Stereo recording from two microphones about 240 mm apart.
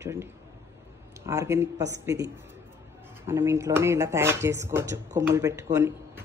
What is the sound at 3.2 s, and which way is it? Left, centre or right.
A man's voice, centre.